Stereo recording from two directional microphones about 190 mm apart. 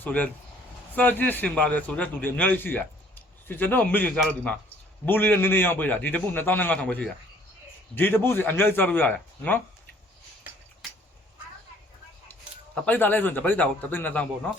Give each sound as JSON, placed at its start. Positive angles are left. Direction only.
{"t": 0.0, "sound": "a man's voice", "side_deg": 10}
{"t": 12.7, "sound": "a man's voice", "side_deg": 10}